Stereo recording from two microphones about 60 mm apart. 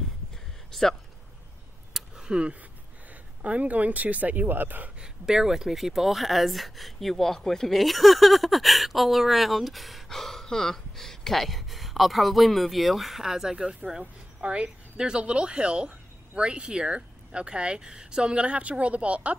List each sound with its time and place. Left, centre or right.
0.7 s speech: centre
2.0 s a sound: centre
3.4 s speech: right
5.0 s speech: centre